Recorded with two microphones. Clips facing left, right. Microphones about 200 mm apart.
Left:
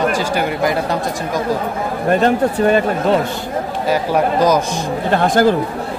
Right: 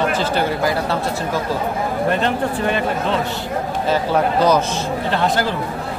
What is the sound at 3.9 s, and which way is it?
Speech, 10° left (ahead or behind).